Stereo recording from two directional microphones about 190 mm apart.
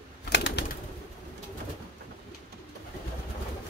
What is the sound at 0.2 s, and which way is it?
Bird, 65° left (ahead or behind).